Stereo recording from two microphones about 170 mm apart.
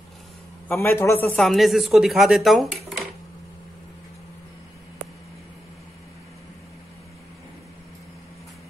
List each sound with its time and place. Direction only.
0.7 s a man's voice: 15° left (ahead or behind)
1.4 s speech: centre (ahead or behind)